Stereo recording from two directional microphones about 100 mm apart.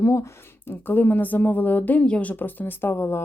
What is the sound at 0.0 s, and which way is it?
Speech, 30° left (ahead or behind).